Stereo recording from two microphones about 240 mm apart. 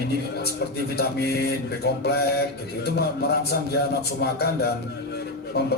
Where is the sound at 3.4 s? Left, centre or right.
Left.